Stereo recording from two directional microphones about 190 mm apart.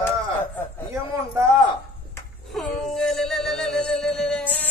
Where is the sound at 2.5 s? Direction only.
Centre (ahead or behind).